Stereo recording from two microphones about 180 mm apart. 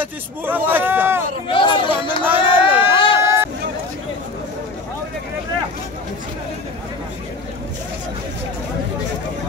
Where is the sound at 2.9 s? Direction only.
30° left (ahead or behind).